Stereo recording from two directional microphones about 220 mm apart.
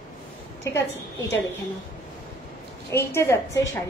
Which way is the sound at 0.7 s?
10° left (ahead or behind).